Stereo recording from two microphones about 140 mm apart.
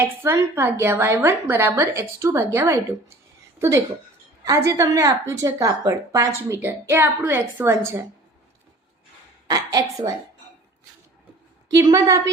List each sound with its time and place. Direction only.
0.0 s a woman's voice: 15° right (ahead or behind)
11.7 s a woman's voice: 25° right (ahead or behind)